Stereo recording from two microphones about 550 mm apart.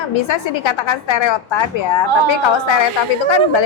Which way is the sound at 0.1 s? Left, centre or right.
Left.